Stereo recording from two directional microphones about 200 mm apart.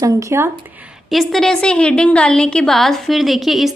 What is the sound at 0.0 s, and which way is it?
Speech, 15° right (ahead or behind).